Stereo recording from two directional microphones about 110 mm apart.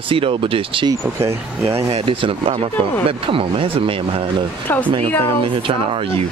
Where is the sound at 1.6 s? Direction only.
25° right (ahead or behind).